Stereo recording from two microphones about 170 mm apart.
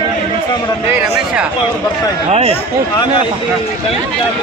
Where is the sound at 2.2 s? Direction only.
40° right (ahead or behind).